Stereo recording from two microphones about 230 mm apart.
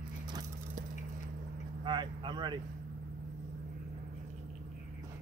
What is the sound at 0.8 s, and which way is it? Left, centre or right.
Squish, right.